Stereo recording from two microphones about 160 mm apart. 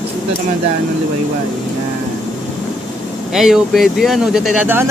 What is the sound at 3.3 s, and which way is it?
Speech, 5° right (ahead or behind).